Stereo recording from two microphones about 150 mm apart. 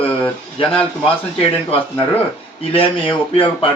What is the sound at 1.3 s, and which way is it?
A man's voice, 40° left (ahead or behind).